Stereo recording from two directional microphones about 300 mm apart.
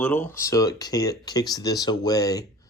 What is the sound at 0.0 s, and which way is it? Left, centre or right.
Speech, centre.